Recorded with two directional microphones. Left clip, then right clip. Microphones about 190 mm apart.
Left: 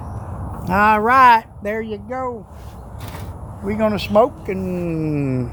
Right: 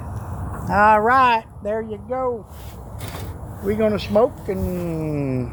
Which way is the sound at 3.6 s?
60° left (ahead or behind).